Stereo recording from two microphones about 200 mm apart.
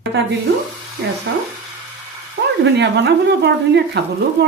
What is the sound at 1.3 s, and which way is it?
Speech, 60° right (ahead or behind).